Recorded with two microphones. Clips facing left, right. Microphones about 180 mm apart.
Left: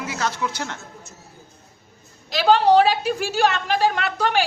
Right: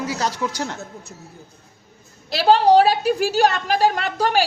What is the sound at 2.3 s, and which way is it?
A woman's voice, 35° right (ahead or behind).